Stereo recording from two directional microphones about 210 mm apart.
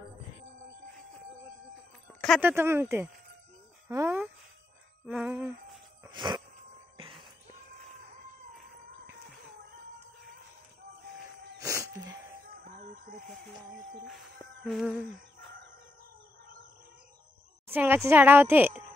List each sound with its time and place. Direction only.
2.2 s speech: centre (ahead or behind)
2.5 s a woman's voice: 10° right (ahead or behind)
5.0 s a sound: 5° right (ahead or behind)
6.0 s a sound: 20° right (ahead or behind)
7.0 s music: 25° right (ahead or behind)
11.6 s a sound: 15° right (ahead or behind)
12.8 s chicken: 45° right (ahead or behind)
14.0 s music: centre (ahead or behind)
17.6 s a woman's voice: 10° right (ahead or behind)